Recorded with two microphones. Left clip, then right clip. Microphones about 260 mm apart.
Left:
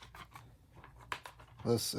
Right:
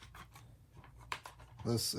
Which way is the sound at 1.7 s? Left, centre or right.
Left.